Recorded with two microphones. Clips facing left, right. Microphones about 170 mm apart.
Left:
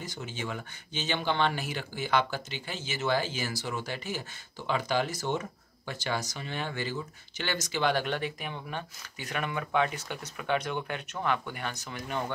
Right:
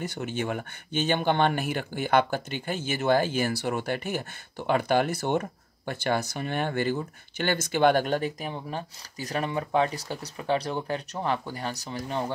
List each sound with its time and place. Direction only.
0.0 s speech: 60° right (ahead or behind); by 12.3 s 30° right (ahead or behind)